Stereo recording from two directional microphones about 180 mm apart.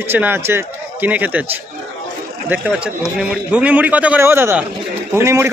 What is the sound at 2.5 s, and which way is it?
Speech, 5° right (ahead or behind).